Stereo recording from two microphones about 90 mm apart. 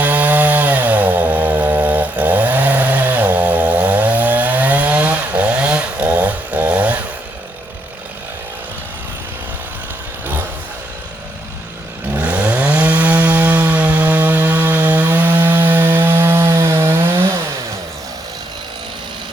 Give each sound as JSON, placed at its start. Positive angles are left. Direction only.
{"t": 0.0, "sound": "chainsaw", "side_deg": -15}
{"t": 12.1, "sound": "chainsaw", "side_deg": -15}